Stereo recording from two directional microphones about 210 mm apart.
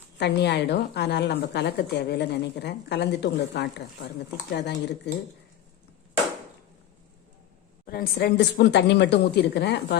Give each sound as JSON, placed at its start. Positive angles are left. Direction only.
{"t": 0.2, "sound": "a woman's voice", "side_deg": 55}
{"t": 7.9, "sound": "a woman's voice", "side_deg": 45}